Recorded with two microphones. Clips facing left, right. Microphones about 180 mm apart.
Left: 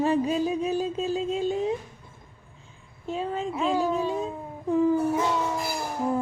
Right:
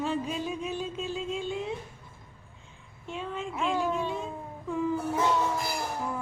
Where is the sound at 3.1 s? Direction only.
35° left (ahead or behind).